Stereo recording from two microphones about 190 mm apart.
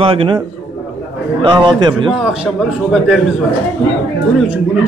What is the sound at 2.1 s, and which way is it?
A man's voice, centre (ahead or behind).